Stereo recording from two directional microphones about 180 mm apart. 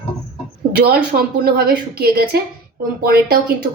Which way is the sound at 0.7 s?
60° right (ahead or behind).